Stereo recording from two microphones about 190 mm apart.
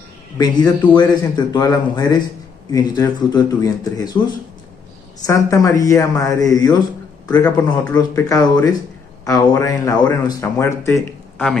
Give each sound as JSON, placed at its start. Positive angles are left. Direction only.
{"t": 0.4, "sound": "a man's voice", "side_deg": 20}
{"t": 5.2, "sound": "speech", "side_deg": 15}
{"t": 7.2, "sound": "a man's voice", "side_deg": 10}